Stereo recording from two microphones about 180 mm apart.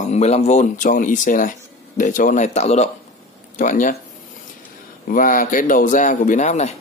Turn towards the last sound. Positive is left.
turn(degrees=40)  # may be behind; listen again after turning